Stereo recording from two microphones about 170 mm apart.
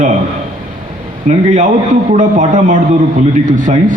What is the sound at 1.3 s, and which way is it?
A man's voice, 45° right (ahead or behind).